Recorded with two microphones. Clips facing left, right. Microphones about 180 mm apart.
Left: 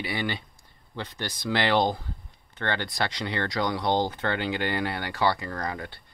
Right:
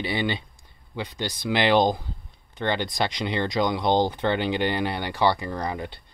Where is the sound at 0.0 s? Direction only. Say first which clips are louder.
Right 4 dB; 20° right (ahead or behind).